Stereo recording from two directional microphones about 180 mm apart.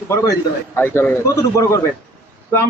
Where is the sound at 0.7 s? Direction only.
10° left (ahead or behind).